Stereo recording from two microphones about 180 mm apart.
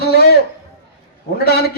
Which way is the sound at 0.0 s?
60° left (ahead or behind).